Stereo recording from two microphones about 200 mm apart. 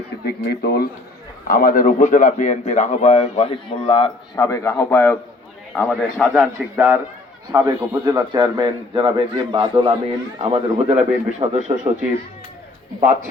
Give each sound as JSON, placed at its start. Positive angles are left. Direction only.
{"t": 0.3, "sound": "a man's voice", "side_deg": 55}
{"t": 4.4, "sound": "a man's voice", "side_deg": 15}